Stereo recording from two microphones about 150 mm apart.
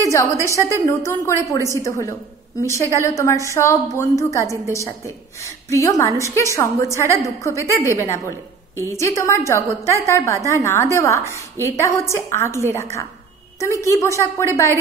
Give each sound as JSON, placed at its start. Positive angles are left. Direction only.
{"t": 0.1, "sound": "a woman's voice", "side_deg": 20}